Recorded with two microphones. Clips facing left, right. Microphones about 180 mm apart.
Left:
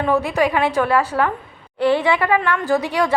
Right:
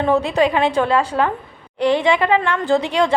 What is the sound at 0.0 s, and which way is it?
A woman's voice, 20° right (ahead or behind).